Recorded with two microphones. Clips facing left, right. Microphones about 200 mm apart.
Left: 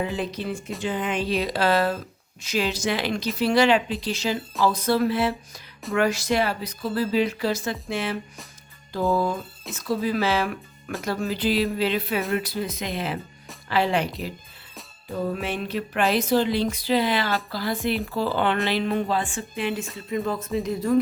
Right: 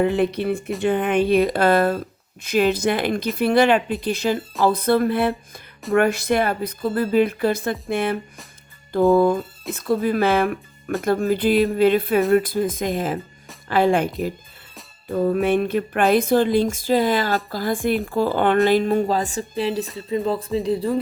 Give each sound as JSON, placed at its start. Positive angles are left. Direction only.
{"t": 0.0, "sound": "a woman's voice", "side_deg": -60}